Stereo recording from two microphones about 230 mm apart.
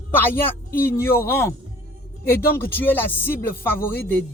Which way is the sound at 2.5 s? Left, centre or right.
Centre.